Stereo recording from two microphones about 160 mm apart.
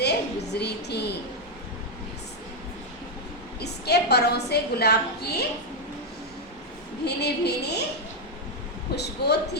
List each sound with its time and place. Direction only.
0.0 s a sound: 90° left
3.6 s a woman's voice: 90° left
7.0 s a woman's voice: 90° left
9.0 s a woman's voice: 90° left